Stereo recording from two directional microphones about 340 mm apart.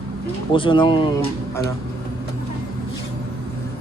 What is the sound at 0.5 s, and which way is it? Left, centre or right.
Speech, centre.